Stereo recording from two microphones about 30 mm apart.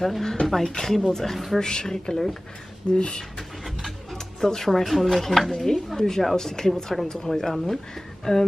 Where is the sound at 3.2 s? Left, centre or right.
Centre.